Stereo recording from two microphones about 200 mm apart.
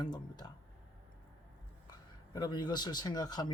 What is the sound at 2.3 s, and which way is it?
Speech, 20° left (ahead or behind).